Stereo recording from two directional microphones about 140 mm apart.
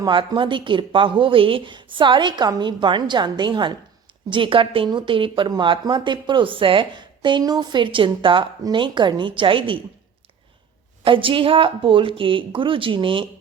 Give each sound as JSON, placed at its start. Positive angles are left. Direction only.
{"t": 0.0, "sound": "a woman's voice", "side_deg": -35}
{"t": 11.0, "sound": "a woman's voice", "side_deg": -40}